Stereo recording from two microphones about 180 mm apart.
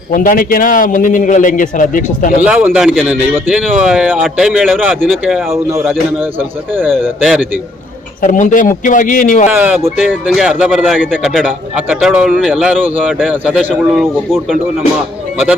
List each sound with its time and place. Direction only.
0.1 s a man's voice: 50° left (ahead or behind)
2.4 s speech: 10° right (ahead or behind)
8.2 s a man's voice: 45° left (ahead or behind)
9.5 s speech: 10° right (ahead or behind)